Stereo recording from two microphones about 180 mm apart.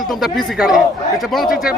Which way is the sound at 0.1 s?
Centre (ahead or behind).